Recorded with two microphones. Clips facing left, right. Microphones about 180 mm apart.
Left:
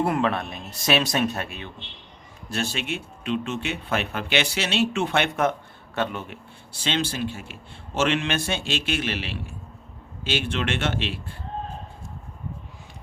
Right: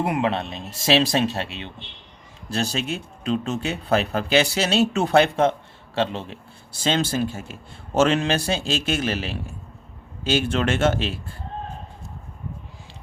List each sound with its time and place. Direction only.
0.0 s speech: 20° right (ahead or behind)
6.8 s speech: 40° right (ahead or behind)